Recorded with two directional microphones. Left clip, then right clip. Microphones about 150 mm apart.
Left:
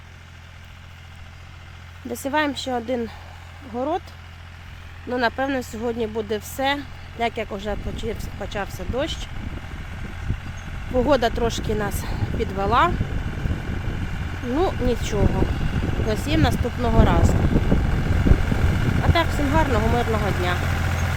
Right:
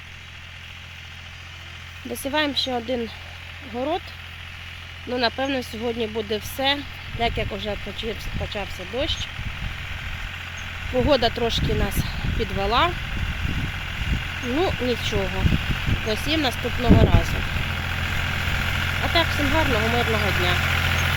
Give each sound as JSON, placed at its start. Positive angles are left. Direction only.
{"t": 2.0, "sound": "speech", "side_deg": 5}
{"t": 5.0, "sound": "speech", "side_deg": 5}
{"t": 8.5, "sound": "speech", "side_deg": 20}
{"t": 9.9, "sound": "vehicle", "side_deg": -10}
{"t": 11.1, "sound": "speech", "side_deg": 5}
{"t": 11.7, "sound": "speech", "side_deg": -5}
{"t": 12.6, "sound": "speech", "side_deg": 5}
{"t": 12.9, "sound": "vehicle", "side_deg": -10}
{"t": 14.6, "sound": "speech", "side_deg": 0}
{"t": 16.6, "sound": "vehicle", "side_deg": 0}